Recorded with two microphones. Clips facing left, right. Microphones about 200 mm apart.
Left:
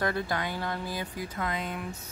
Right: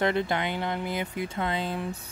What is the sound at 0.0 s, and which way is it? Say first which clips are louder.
Speech: right 4 dB; 20° right (ahead or behind).